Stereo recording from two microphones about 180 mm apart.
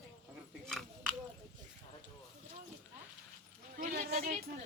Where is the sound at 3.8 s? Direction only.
55° right (ahead or behind).